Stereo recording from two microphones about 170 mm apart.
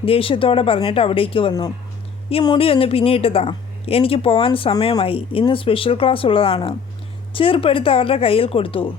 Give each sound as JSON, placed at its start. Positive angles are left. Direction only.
{"t": 0.0, "sound": "a woman's voice", "side_deg": 30}